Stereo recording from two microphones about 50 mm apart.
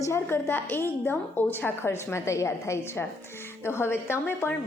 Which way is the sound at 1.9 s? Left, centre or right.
Left.